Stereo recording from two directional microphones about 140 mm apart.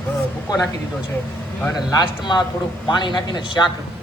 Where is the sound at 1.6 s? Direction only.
25° left (ahead or behind).